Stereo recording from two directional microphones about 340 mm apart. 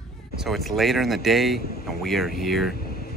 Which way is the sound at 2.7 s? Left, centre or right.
Left.